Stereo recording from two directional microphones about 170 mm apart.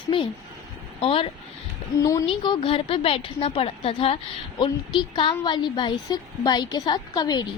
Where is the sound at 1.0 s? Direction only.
35° left (ahead or behind).